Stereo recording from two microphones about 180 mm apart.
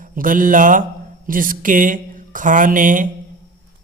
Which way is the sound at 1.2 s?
50° right (ahead or behind).